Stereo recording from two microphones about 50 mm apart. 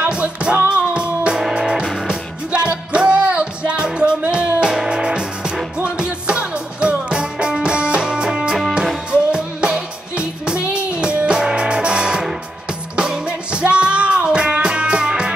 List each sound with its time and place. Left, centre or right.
0.1 s music: right
13.3 s music: right